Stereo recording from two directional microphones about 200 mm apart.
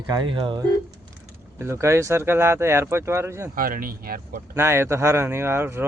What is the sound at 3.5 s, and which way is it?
Speech, 45° right (ahead or behind).